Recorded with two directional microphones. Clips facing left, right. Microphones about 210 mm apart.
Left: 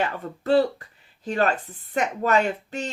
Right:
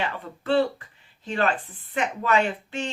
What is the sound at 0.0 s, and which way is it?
Speech, 40° left (ahead or behind).